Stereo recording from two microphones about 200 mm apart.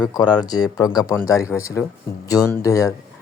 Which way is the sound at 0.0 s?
20° left (ahead or behind).